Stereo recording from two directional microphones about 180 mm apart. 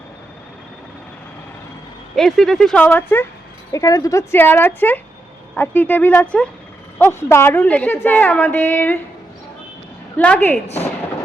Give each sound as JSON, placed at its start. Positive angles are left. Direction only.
{"t": 2.1, "sound": "a woman's voice", "side_deg": 0}
{"t": 10.2, "sound": "a woman's voice", "side_deg": 10}